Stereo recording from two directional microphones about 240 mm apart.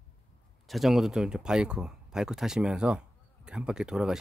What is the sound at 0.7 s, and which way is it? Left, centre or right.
Speech, centre.